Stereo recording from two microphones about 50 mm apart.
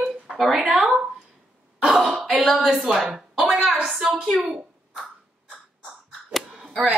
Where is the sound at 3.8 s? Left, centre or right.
Centre.